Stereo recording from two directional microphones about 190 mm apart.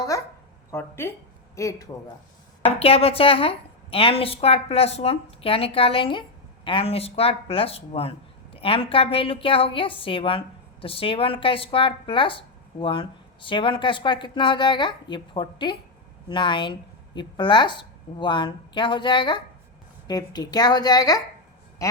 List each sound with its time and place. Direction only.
0.7 s speech: 10° left (ahead or behind)
2.7 s a woman's voice: 30° left (ahead or behind)